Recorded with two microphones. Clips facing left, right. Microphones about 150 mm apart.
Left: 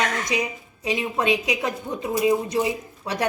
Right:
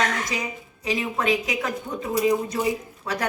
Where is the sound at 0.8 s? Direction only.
25° left (ahead or behind).